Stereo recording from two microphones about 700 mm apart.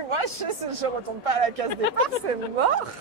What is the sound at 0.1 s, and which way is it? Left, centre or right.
Speech, right.